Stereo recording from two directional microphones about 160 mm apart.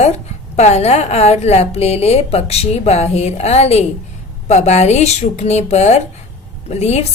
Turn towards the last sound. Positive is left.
turn(degrees=40)  # may be behind; listen again after turning